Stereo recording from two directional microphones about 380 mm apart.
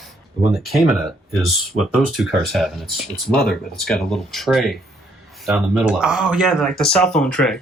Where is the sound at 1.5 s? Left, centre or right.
Centre.